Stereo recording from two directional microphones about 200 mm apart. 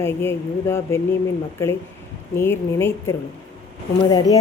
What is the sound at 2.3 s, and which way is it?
Speech, 10° left (ahead or behind).